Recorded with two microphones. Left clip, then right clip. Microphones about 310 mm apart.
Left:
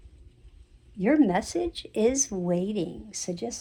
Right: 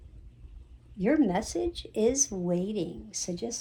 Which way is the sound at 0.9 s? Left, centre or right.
Left.